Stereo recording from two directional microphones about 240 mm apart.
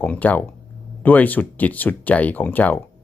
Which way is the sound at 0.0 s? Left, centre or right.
Centre.